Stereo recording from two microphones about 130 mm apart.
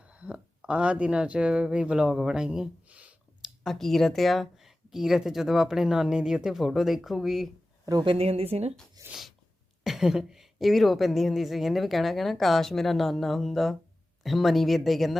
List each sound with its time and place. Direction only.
0.0 s speech: 10° right (ahead or behind)
3.6 s a woman's voice: 5° left (ahead or behind)
8.0 s a woman's voice: 50° right (ahead or behind)
9.0 s a sound: 25° right (ahead or behind)
9.8 s a woman's voice: 5° right (ahead or behind)